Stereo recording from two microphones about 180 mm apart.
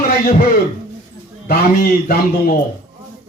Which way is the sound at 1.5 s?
55° left (ahead or behind).